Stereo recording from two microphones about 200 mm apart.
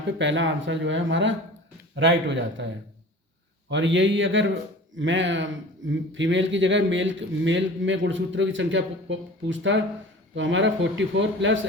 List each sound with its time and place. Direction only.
0.2 s speech: 65° right (ahead or behind)
3.7 s speech: 65° right (ahead or behind)